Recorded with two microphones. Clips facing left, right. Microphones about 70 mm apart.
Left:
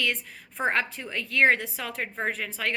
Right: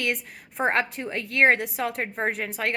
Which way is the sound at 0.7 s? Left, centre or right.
Right.